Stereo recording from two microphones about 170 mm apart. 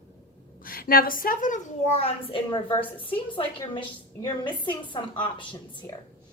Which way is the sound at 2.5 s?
25° left (ahead or behind).